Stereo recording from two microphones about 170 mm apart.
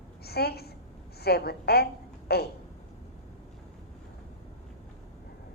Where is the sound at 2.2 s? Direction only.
70° left (ahead or behind).